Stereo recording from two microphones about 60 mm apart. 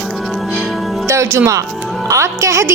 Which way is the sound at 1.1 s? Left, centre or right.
Right.